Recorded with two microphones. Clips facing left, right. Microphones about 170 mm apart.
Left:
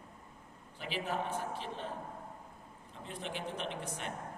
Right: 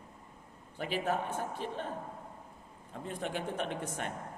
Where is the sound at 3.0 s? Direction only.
50° right (ahead or behind).